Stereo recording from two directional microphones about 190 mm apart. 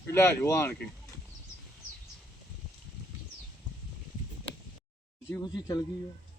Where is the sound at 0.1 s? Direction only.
15° left (ahead or behind).